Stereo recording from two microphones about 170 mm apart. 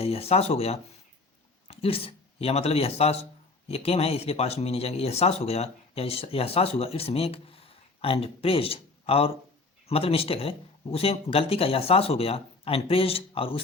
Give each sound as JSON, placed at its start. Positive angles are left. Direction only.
{"t": 0.0, "sound": "speech", "side_deg": 35}